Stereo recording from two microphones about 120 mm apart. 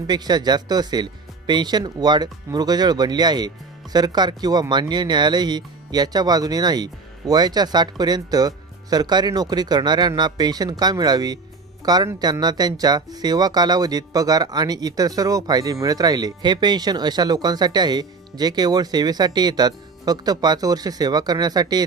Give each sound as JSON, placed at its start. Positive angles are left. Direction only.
{"t": 0.0, "sound": "speech", "side_deg": -35}